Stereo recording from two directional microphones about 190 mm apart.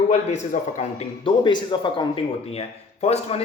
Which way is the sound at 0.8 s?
30° left (ahead or behind).